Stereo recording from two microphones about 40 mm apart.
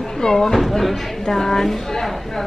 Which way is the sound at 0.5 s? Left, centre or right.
Centre.